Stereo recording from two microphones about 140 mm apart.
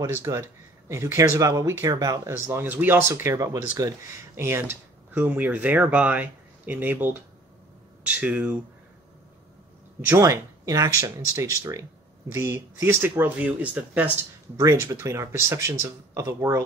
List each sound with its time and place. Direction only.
0.0 s speech: 20° right (ahead or behind)
10.0 s speech: 20° right (ahead or behind)
14.6 s speech: 20° right (ahead or behind)